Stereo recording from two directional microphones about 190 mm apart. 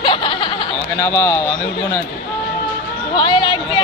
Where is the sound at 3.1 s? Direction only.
25° left (ahead or behind).